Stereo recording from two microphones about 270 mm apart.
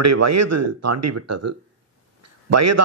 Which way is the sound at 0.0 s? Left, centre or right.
Right.